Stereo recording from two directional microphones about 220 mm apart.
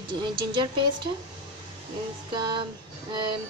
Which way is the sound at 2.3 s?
20° right (ahead or behind).